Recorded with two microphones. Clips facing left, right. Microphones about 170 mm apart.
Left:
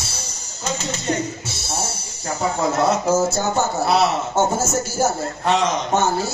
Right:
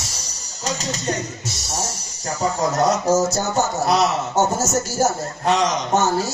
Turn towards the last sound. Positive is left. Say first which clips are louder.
# even
turn(degrees=-40)  # may be behind; listen again after turning